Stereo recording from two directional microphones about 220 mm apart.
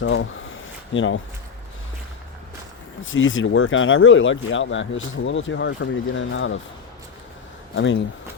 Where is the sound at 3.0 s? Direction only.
65° left (ahead or behind).